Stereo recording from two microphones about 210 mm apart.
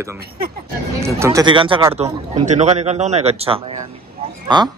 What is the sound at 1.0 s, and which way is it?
A man's voice, 15° right (ahead or behind).